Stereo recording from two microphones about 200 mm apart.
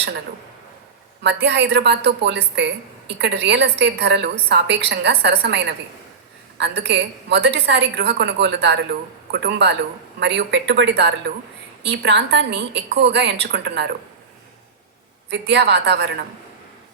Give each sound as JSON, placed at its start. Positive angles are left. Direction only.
{"t": 1.2, "sound": "a woman's voice", "side_deg": -60}
{"t": 15.3, "sound": "a woman's voice", "side_deg": -60}